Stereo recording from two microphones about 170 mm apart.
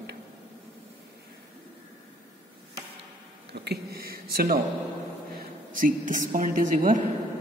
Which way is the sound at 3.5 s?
65° right (ahead or behind).